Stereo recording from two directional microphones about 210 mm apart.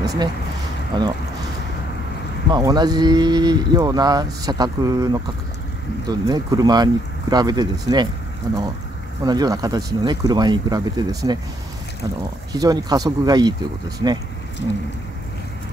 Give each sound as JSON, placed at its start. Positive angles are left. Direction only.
{"t": 0.0, "sound": "a sound", "side_deg": -15}
{"t": 0.9, "sound": "speech", "side_deg": -20}
{"t": 2.5, "sound": "speech", "side_deg": -20}
{"t": 12.5, "sound": "speech", "side_deg": -15}